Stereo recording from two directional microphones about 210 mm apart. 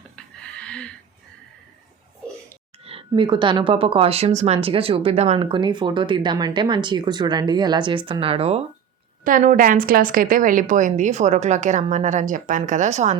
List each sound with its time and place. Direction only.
0.2 s music: 5° left (ahead or behind)
2.8 s a sound: 25° right (ahead or behind)
3.1 s speech: 20° right (ahead or behind)
9.2 s a woman's voice: 40° right (ahead or behind)